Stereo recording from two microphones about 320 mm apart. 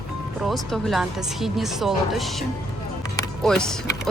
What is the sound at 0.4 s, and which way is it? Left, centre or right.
Speech, centre.